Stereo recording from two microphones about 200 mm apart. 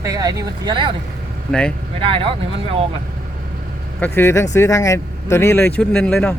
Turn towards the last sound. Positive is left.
turn(degrees=5)  # may be behind; listen again after turning